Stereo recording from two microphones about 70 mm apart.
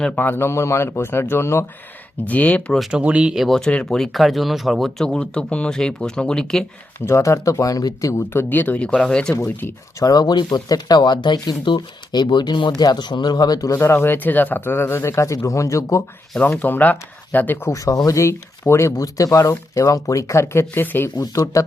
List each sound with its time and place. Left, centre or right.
0.2 s speech: left
2.2 s speech: left
2.9 s speech: centre
3.3 s speech: centre
3.6 s speech: centre
3.9 s speech: centre
7.0 s speech: left
8.3 s speech: left; by 9.3 s centre
10.0 s speech: left
13.7 s speech: left
16.4 s speech: left
17.7 s speech: left
18.2 s speech: left
21.2 s speech: left